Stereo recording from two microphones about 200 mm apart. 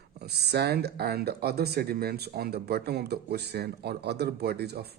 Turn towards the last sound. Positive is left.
turn(degrees=-55)  # may be behind; listen again after turning